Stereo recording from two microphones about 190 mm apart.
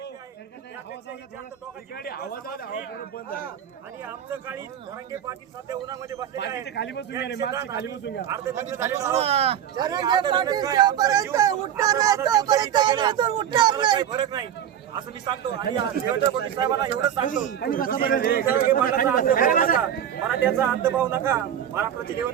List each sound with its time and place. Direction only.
2.0 s a man's voice: 55° left (ahead or behind)
4.0 s speech: 10° right (ahead or behind)
6.7 s a man's voice: 65° left (ahead or behind)
8.3 s speech: 15° right (ahead or behind)
9.1 s speech: 35° right (ahead or behind)
17.2 s a man's voice: 40° left (ahead or behind)
20.2 s speech: 10° right (ahead or behind)